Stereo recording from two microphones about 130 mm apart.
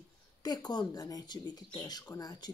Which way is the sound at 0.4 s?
30° left (ahead or behind).